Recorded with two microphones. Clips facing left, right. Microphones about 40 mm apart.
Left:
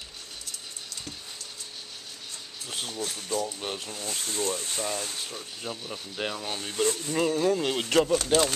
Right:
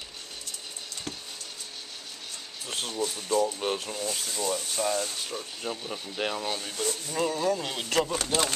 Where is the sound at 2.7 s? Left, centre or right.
Centre.